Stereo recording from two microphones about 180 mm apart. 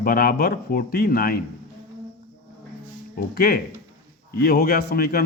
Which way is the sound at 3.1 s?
60° left (ahead or behind).